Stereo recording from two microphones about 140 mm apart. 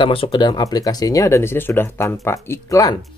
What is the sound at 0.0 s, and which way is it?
Speech, 40° left (ahead or behind).